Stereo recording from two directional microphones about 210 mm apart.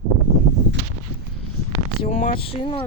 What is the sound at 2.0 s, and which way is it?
Speech, 35° left (ahead or behind).